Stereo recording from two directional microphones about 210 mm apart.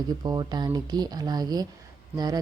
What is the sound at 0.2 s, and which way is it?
Speech, 20° right (ahead or behind).